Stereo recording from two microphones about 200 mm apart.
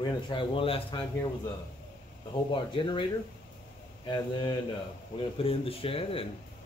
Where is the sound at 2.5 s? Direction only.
25° left (ahead or behind).